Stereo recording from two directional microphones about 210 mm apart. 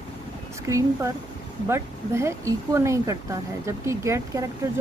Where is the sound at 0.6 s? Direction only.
15° right (ahead or behind).